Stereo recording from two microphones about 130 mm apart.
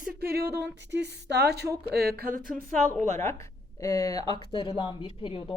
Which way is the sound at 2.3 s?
85° right.